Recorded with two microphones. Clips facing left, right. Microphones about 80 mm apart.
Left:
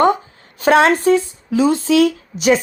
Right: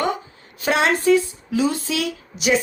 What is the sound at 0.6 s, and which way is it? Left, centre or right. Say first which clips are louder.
Speech: left 7 dB; left.